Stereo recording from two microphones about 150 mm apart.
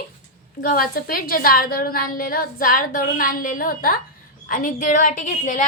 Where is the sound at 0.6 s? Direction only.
70° left (ahead or behind).